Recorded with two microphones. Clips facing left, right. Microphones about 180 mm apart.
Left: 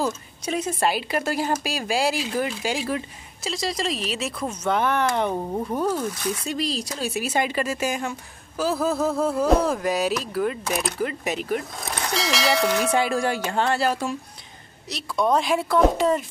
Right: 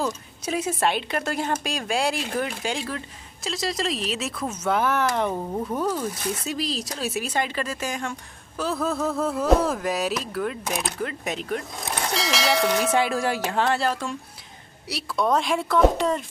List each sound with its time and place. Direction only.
0.0 s a woman's voice: 5° right (ahead or behind)
7.3 s a woman's voice: 10° left (ahead or behind)
14.9 s a woman's voice: 5° right (ahead or behind)